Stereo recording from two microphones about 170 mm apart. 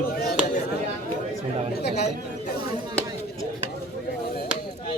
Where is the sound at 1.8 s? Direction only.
75° left (ahead or behind).